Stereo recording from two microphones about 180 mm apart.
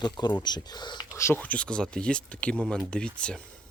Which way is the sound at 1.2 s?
10° left (ahead or behind).